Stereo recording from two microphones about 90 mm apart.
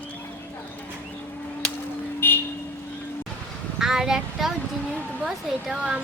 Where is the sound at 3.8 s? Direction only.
5° right (ahead or behind).